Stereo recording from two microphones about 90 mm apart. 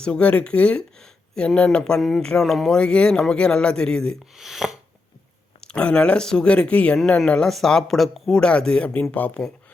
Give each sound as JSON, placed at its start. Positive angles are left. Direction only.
{"t": 0.0, "sound": "speech", "side_deg": 15}
{"t": 4.4, "sound": "speech", "side_deg": -5}
{"t": 5.5, "sound": "speech", "side_deg": 10}